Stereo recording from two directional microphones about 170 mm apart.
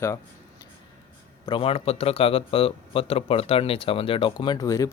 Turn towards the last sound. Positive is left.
turn(degrees=20)  # may be behind; listen again after turning